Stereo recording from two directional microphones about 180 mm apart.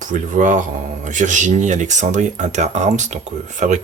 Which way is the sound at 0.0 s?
45° right (ahead or behind).